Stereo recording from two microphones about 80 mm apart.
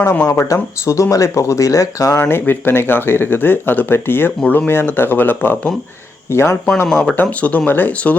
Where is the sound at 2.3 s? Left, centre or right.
Left.